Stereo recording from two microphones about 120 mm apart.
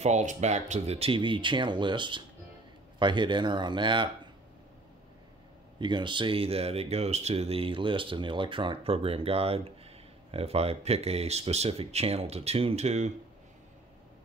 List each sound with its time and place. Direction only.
0.0 s speech: 80° right; by 4.3 s 40° right (ahead or behind)
5.8 s speech: 40° right (ahead or behind); by 13.1 s 70° right (ahead or behind)